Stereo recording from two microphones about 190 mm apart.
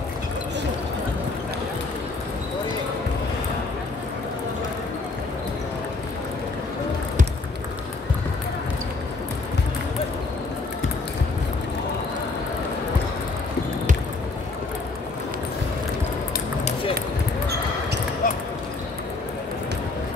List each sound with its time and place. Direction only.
18.2 s dog: 45° left (ahead or behind)